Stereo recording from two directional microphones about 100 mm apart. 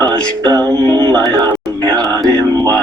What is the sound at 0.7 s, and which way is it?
Music, 45° right (ahead or behind).